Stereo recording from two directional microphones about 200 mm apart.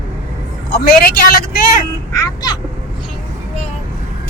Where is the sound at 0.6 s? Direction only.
50° left (ahead or behind).